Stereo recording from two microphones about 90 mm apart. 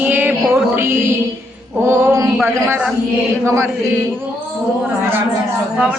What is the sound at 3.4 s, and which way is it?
Chant, 30° right (ahead or behind).